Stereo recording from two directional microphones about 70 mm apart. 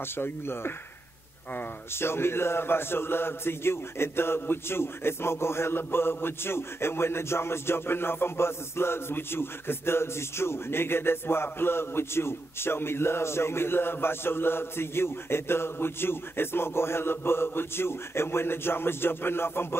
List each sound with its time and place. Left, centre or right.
0.0 s a man's voice: left